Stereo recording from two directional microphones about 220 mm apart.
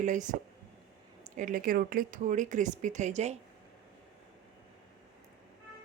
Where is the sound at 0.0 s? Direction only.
35° right (ahead or behind).